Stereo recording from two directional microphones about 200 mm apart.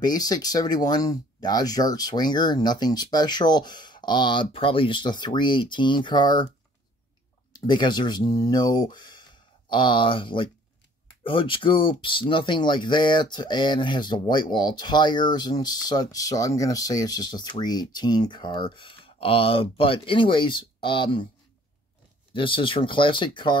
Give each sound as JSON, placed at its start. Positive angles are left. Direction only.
{"t": 0.0, "sound": "speech", "side_deg": 20}
{"t": 7.5, "sound": "speech", "side_deg": 20}
{"t": 22.3, "sound": "speech", "side_deg": 25}